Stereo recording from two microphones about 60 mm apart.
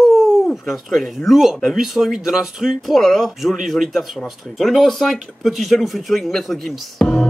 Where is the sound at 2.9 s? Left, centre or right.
Centre.